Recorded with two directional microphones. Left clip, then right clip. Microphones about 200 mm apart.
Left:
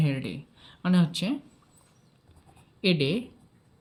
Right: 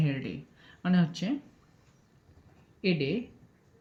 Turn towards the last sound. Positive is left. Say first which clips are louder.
# left 4 dB
turn(degrees=35)  # may be behind; listen again after turning